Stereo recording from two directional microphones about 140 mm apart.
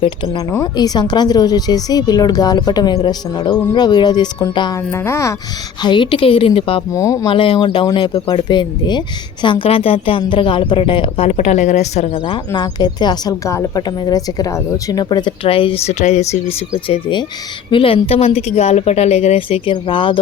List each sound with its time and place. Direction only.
0.3 s speech: 25° left (ahead or behind)
4.9 s speech: 20° left (ahead or behind)
5.8 s speech: 35° left (ahead or behind)
6.9 s speech: 25° left (ahead or behind)
7.3 s speech: 40° left (ahead or behind)
11.3 s a woman's voice: 55° left (ahead or behind); by 12.4 s 40° left (ahead or behind)
12.5 s speech: 30° left (ahead or behind)
15.4 s a woman's voice: 40° left (ahead or behind)
16.9 s a woman's voice: 35° left (ahead or behind)